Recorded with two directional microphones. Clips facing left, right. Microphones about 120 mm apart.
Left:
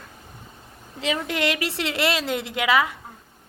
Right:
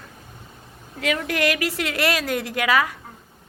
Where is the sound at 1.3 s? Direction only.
25° left (ahead or behind).